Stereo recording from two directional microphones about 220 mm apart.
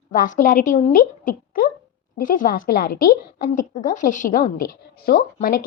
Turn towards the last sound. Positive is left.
turn(degrees=40)  # may be behind; listen again after turning